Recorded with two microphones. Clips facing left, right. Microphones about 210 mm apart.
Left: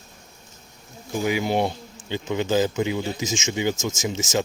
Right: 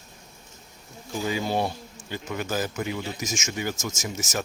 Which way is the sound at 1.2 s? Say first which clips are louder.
Left 4 dB; 15° left (ahead or behind).